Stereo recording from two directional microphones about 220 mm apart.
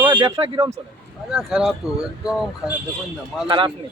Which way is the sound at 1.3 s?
5° right (ahead or behind).